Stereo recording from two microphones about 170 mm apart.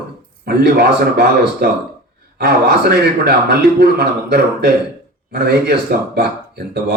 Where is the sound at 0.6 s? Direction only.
70° right (ahead or behind).